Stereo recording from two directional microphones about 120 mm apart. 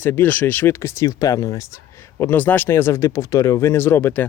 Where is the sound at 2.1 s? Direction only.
15° left (ahead or behind).